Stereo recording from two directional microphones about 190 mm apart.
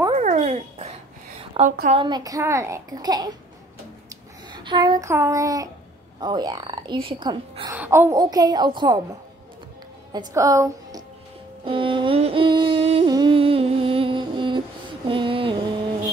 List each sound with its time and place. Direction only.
0.1 s dog: 40° right (ahead or behind)
1.6 s a woman's voice: 35° right (ahead or behind)
4.5 s a child's voice: 25° right (ahead or behind)
7.7 s a child's voice: 10° right (ahead or behind)
10.1 s a woman's voice: 15° right (ahead or behind)
11.6 s a sound: 25° right (ahead or behind)
15.0 s music: 25° right (ahead or behind)